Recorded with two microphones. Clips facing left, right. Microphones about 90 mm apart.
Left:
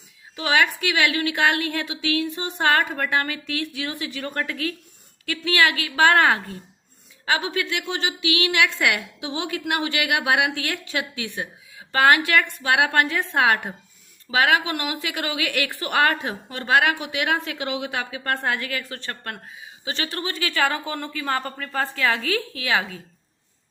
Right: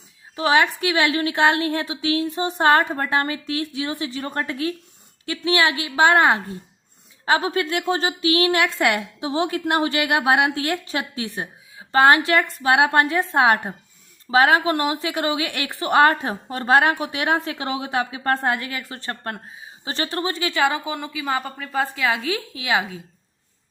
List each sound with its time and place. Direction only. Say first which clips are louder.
0.3 s a woman's voice: right 3 dB; 30° right (ahead or behind)
7.3 s a woman's voice: right 4 dB; 35° right (ahead or behind); by 23.0 s 15° right (ahead or behind)